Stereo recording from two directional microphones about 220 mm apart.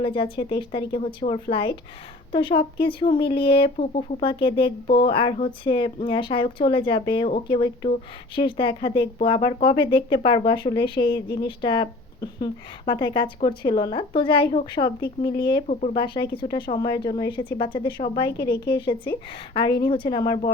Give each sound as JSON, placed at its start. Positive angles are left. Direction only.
{"t": 0.0, "sound": "speech", "side_deg": 20}
{"t": 15.6, "sound": "speech", "side_deg": 30}